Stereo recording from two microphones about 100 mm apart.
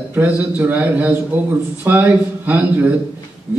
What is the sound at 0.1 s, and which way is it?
A man's voice, 20° right (ahead or behind).